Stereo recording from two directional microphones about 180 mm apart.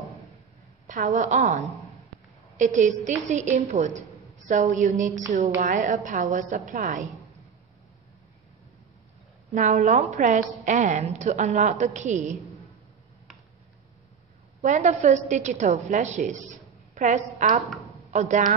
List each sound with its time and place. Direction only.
0.8 s a woman's voice: 45° right (ahead or behind)
9.5 s a woman's voice: 40° right (ahead or behind)
14.6 s a woman's voice: 40° right (ahead or behind)